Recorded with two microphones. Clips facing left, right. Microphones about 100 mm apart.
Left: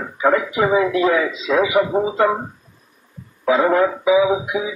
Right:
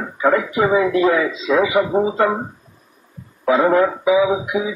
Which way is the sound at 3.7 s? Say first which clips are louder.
Even; 10° left (ahead or behind).